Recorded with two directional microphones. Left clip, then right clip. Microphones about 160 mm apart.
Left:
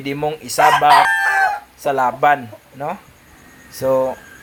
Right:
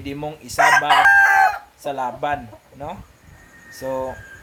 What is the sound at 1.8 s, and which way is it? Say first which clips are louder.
Speech: left 8 dB; centre (ahead or behind).